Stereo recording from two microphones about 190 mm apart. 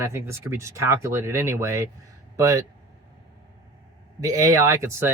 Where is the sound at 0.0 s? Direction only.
15° right (ahead or behind).